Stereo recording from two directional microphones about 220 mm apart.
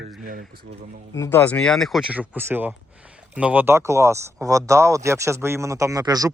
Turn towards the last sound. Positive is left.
turn(degrees=-15)  # may be behind; listen again after turning